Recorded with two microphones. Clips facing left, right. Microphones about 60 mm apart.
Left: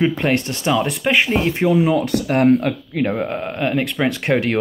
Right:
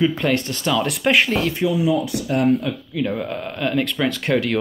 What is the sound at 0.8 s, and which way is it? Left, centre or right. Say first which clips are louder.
Speech: even; centre.